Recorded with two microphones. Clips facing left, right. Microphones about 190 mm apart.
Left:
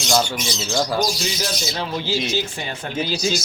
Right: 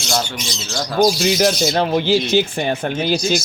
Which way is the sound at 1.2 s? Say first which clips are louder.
Right 10 dB; 65° right (ahead or behind).